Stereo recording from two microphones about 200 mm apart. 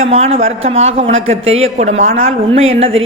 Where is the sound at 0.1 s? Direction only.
30° right (ahead or behind).